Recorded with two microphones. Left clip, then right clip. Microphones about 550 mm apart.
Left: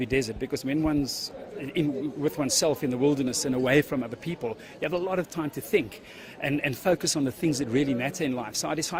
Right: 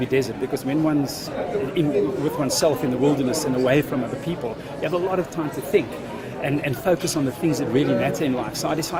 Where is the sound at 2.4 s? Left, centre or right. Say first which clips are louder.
Right 5 dB; left.